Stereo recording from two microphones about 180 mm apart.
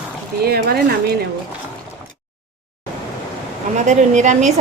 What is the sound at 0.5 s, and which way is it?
Speech, 60° right (ahead or behind).